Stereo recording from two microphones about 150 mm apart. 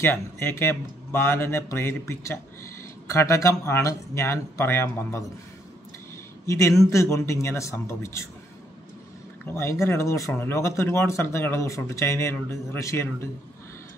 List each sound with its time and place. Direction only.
0.0 s speech: 15° left (ahead or behind)
6.4 s speech: 20° left (ahead or behind)
9.5 s speech: 20° left (ahead or behind)